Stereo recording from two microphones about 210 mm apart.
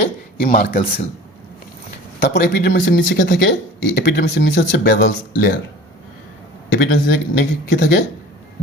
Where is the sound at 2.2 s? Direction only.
50° left (ahead or behind).